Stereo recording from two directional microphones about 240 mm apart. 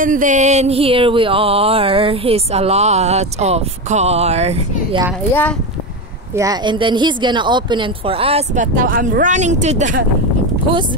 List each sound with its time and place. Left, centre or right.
0.0 s music: right
6.3 s music: centre; by 10.0 s right